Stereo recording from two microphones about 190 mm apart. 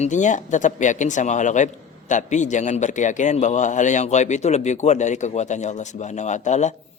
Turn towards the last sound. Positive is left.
turn(degrees=40)  # may be behind; listen again after turning